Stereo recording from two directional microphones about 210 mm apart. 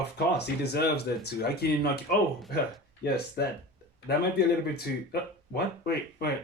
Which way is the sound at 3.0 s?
50° left (ahead or behind).